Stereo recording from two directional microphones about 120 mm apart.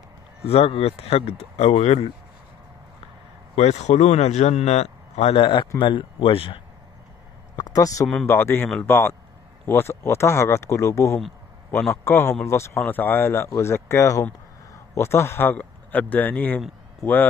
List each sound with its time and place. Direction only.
0.5 s a man's voice: 55° left (ahead or behind)
3.5 s a man's voice: 65° left (ahead or behind); by 6.6 s 50° left (ahead or behind)
7.5 s speech: 35° left (ahead or behind); by 17.3 s 15° left (ahead or behind)